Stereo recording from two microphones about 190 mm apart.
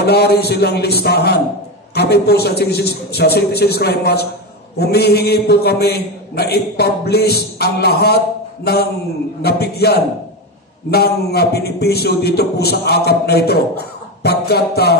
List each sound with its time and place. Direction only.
0.0 s a man's voice: 55° left (ahead or behind)
9.4 s a man's voice: 55° left (ahead or behind)